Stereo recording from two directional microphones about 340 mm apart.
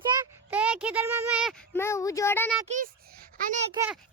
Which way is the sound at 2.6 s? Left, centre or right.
Right.